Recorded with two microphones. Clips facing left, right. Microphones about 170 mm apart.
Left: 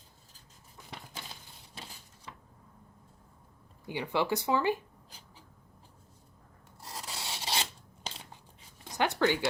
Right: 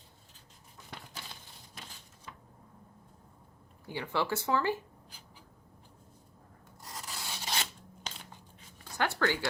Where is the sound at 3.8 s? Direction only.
15° left (ahead or behind).